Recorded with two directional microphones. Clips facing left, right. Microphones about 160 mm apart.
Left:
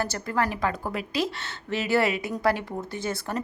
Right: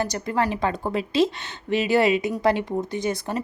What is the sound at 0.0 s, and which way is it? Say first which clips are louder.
A woman's voice: right 3 dB; 20° right (ahead or behind).